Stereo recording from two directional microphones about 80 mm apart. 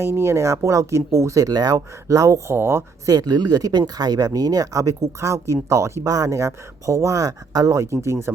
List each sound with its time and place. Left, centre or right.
0.0 s speech: right
2.5 s speech: right
3.1 s speech: right